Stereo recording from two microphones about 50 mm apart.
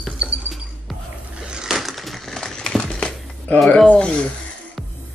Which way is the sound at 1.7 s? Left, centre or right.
Centre.